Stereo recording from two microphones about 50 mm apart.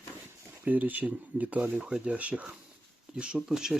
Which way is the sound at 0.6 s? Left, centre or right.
Right.